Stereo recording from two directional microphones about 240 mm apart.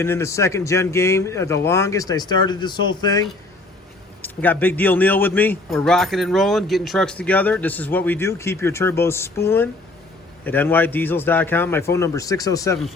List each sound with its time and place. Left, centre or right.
0.0 s speech: centre